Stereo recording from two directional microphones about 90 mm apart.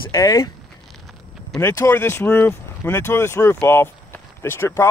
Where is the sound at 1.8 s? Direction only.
25° left (ahead or behind).